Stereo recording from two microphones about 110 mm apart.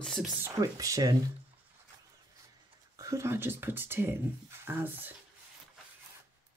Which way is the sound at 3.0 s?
25° right (ahead or behind).